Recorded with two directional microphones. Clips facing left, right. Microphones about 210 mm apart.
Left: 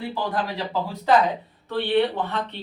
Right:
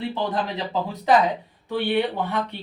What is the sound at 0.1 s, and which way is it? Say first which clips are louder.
A man's voice: right 1 dB; 20° right (ahead or behind).